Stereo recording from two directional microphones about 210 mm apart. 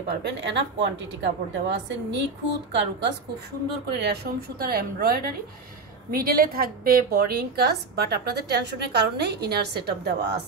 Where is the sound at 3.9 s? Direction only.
50° right (ahead or behind).